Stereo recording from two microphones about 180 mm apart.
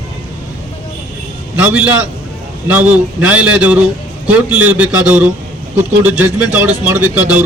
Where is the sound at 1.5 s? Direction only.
10° right (ahead or behind).